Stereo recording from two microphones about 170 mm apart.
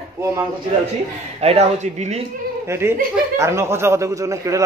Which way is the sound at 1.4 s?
40° right (ahead or behind).